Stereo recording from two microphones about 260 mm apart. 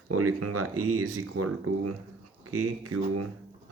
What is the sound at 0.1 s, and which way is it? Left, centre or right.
Speech, right.